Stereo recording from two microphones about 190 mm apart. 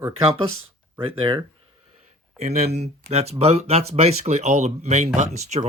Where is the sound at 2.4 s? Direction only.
35° right (ahead or behind).